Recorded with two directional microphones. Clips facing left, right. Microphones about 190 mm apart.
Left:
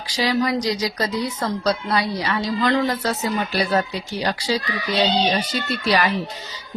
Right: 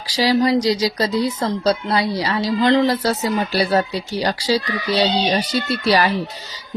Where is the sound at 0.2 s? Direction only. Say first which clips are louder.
Right 5 dB; 30° right (ahead or behind).